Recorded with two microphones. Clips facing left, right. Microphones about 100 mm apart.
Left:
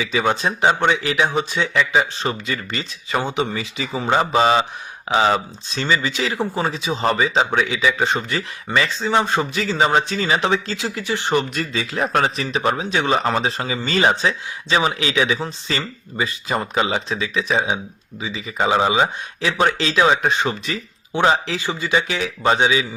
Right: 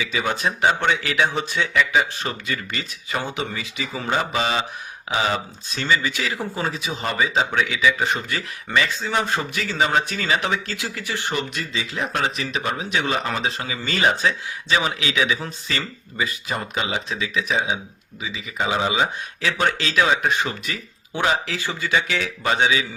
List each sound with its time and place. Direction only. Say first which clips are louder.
0.0 s speech: left 4 dB; 30° left (ahead or behind)
1.7 s speech: left 1 dB; 30° left (ahead or behind)
11.3 s speech: left 6 dB; 45° left (ahead or behind); by 21.6 s 30° left (ahead or behind)
21.7 s speech: left 2 dB; 20° left (ahead or behind)